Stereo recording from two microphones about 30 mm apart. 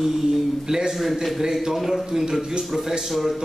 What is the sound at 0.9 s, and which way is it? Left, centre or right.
A man's voice, centre.